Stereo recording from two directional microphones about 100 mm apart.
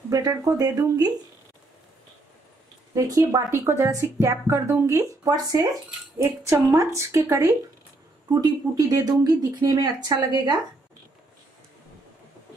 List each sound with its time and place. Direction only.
0.1 s speech: 35° right (ahead or behind)
2.9 s speech: 35° right (ahead or behind)
6.1 s speech: 25° right (ahead or behind); by 10.6 s 45° right (ahead or behind)